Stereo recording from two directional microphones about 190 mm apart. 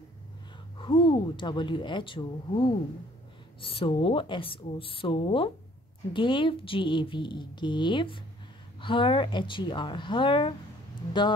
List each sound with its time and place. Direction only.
0.7 s speech: 25° left (ahead or behind)